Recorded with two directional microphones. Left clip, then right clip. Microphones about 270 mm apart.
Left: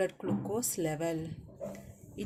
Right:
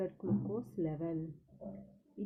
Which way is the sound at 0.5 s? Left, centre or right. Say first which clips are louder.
Left 5 dB; centre.